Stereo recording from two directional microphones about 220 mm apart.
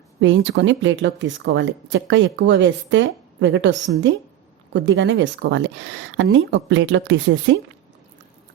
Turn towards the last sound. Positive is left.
turn(degrees=-55)  # may be behind; listen again after turning